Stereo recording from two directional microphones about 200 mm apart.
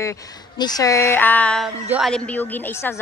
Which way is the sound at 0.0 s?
15° left (ahead or behind).